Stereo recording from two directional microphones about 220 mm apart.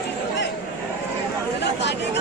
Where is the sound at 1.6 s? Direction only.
50° left (ahead or behind).